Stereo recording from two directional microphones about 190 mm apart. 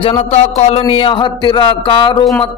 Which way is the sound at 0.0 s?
30° left (ahead or behind).